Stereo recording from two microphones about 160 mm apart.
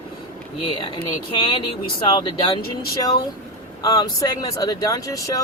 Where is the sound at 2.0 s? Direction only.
30° left (ahead or behind).